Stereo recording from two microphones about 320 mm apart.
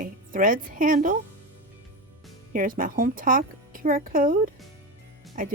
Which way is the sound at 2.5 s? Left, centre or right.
Right.